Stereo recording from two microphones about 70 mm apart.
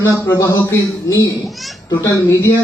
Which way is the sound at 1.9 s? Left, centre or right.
Left.